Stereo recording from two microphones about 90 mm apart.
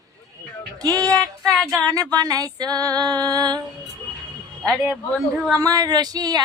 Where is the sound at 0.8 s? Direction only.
40° right (ahead or behind).